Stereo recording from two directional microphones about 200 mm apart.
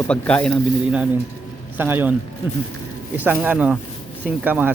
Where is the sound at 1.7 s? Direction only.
10° right (ahead or behind).